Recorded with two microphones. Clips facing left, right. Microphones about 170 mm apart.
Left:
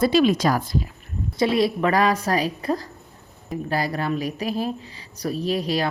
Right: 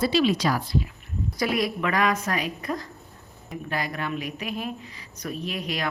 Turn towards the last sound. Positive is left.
turn(degrees=35)  # may be behind; listen again after turning